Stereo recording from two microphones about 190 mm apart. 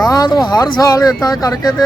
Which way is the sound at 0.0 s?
20° left (ahead or behind).